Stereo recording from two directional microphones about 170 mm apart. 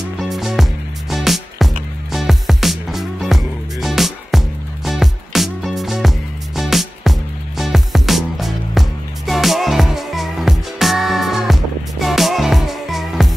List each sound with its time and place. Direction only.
0.2 s music: centre (ahead or behind)